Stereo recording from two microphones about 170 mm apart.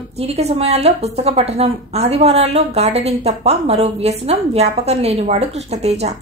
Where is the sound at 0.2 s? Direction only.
40° right (ahead or behind).